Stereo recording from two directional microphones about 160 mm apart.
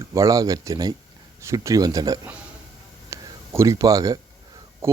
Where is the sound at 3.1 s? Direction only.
20° right (ahead or behind).